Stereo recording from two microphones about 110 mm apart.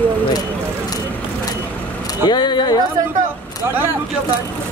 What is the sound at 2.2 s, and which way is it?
Speech, 40° left (ahead or behind).